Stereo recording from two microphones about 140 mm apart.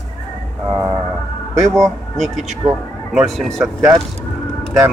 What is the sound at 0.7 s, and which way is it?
Speech, 30° right (ahead or behind).